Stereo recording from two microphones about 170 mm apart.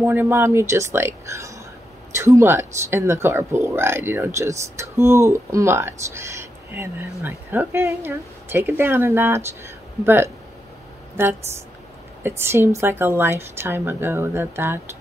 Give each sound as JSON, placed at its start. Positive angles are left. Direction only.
{"t": 0.0, "sound": "speech", "side_deg": -15}